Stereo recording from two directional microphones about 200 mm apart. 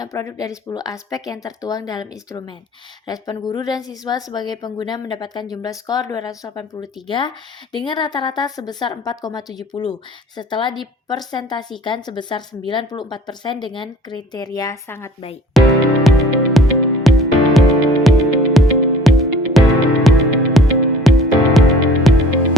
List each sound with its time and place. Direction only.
0.0 s a woman's voice: 15° left (ahead or behind)
15.6 s music: centre (ahead or behind)